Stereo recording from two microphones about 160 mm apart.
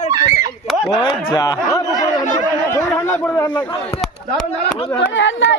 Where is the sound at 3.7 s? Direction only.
40° left (ahead or behind).